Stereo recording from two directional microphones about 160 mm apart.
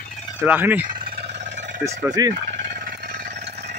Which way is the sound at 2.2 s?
20° right (ahead or behind).